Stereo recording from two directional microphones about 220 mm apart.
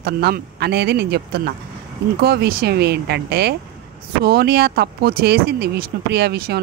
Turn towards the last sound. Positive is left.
turn(degrees=-45)  # may be behind; listen again after turning